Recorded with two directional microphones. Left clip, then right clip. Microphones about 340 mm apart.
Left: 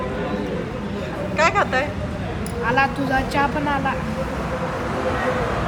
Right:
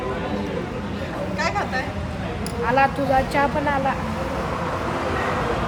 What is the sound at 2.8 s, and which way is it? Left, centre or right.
Speech, right.